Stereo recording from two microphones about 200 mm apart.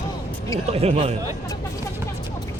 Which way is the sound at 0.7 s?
30° right (ahead or behind).